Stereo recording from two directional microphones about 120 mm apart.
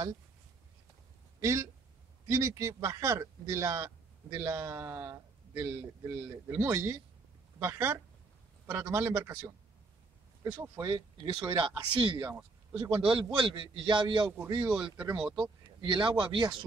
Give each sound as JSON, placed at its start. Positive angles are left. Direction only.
{"t": 1.4, "sound": "speech", "side_deg": -25}
{"t": 10.9, "sound": "a man's voice", "side_deg": -35}
{"t": 14.7, "sound": "speech", "side_deg": -5}
{"t": 15.6, "sound": "speech", "side_deg": -45}